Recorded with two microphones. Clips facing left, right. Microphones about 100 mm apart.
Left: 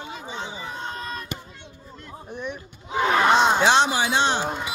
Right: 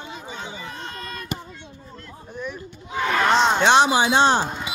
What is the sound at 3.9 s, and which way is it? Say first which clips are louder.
Speech: right 5 dB; 30° right (ahead or behind).